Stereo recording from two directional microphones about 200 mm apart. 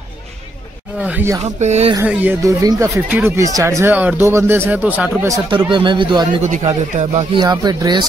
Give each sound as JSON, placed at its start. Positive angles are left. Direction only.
{"t": 1.0, "sound": "speech", "side_deg": -10}
{"t": 1.4, "sound": "speech", "side_deg": -35}
{"t": 2.0, "sound": "speech", "side_deg": -10}
{"t": 5.7, "sound": "speech", "side_deg": -25}
{"t": 6.4, "sound": "speech", "side_deg": -35}
{"t": 7.2, "sound": "speech", "side_deg": -20}